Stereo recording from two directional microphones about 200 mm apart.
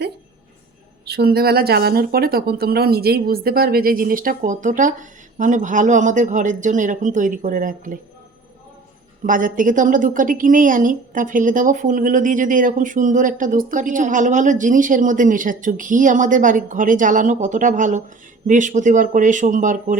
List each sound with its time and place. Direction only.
1.0 s speech: 55° right (ahead or behind)
9.2 s a woman's voice: 40° right (ahead or behind)